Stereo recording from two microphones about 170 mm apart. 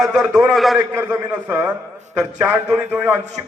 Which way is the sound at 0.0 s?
Centre (ahead or behind).